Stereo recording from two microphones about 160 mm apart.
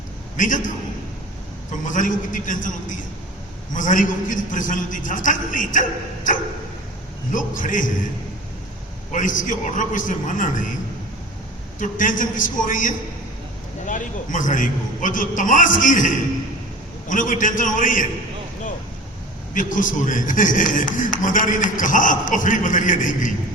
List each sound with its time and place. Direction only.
0.3 s a man's voice: 55° left (ahead or behind)
1.7 s a man's voice: 55° left (ahead or behind)
7.3 s a man's voice: 55° left (ahead or behind)
9.1 s a man's voice: 55° left (ahead or behind)
11.8 s a man's voice: 55° left (ahead or behind)
19.5 s a man's voice: 55° left (ahead or behind)